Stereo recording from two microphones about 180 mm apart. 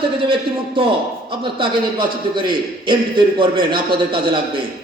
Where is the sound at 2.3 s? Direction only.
25° right (ahead or behind).